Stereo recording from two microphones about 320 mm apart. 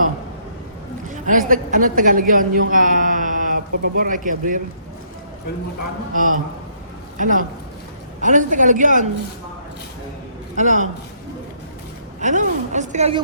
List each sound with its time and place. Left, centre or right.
1.1 s a woman's voice: right
6.1 s a woman's voice: right
10.6 s a woman's voice: right
12.2 s a woman's voice: right